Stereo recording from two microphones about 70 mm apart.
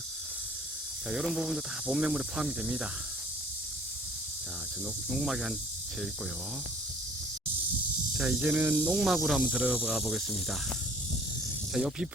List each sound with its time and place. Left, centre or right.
1.1 s speech: centre
5.1 s speech: centre
8.2 s speech: centre
8.4 s speech: right
9.0 s speech: centre
11.7 s speech: centre